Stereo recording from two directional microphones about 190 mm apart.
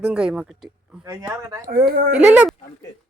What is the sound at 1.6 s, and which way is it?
Speech, 50° right (ahead or behind).